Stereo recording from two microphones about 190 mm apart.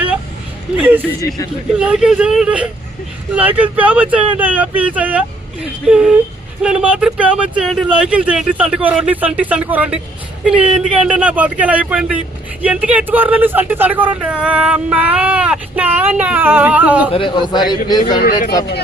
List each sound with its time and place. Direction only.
0.8 s speech: 10° right (ahead or behind)
17.1 s a man's voice: 25° left (ahead or behind)
18.2 s speech: 55° left (ahead or behind)